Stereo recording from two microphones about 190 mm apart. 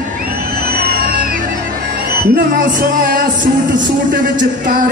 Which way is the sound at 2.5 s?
50° right (ahead or behind).